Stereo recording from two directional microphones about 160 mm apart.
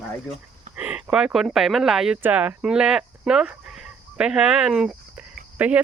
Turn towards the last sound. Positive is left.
turn(degrees=-10)  # may be behind; listen again after turning